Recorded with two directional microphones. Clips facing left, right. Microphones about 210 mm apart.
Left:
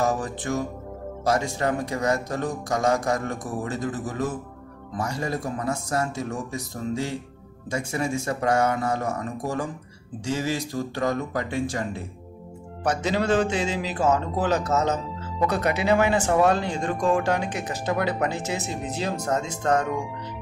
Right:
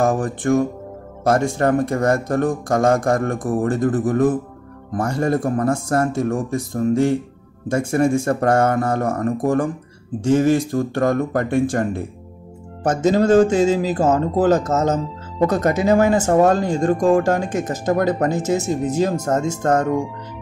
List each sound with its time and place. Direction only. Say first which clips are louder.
0.0 s speech: right 7 dB; 55° right (ahead or behind)